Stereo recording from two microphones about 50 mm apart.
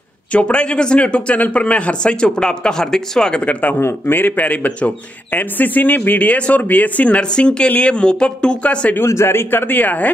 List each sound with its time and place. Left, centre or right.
0.3 s speech: left
3.8 s speech: left
9.0 s a man's voice: left